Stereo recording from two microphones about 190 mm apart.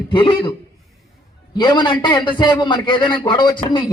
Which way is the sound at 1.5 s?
20° left (ahead or behind).